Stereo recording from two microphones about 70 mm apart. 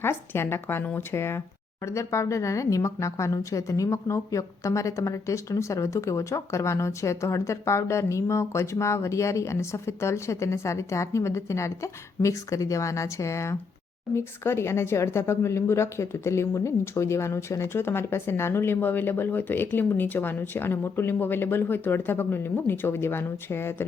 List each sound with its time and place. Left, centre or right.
0.0 s a woman's voice: left